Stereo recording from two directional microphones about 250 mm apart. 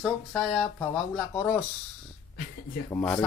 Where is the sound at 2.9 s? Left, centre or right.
Centre.